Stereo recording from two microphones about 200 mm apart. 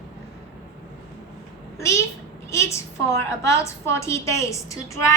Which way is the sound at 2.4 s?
15° left (ahead or behind).